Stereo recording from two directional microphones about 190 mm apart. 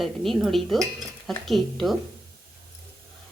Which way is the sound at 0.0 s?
Centre (ahead or behind).